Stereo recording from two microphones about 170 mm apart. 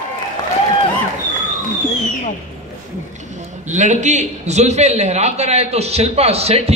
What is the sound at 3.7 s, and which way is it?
A man's voice, 45° right (ahead or behind).